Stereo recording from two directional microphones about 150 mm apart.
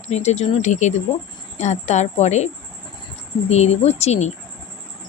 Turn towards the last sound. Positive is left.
turn(degrees=45)  # may be behind; listen again after turning